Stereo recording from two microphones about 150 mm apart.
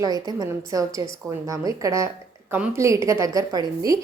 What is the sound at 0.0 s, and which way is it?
A woman's voice, 25° right (ahead or behind).